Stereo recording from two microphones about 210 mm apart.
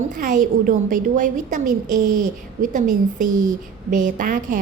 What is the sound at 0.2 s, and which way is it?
A woman's voice, 40° right (ahead or behind).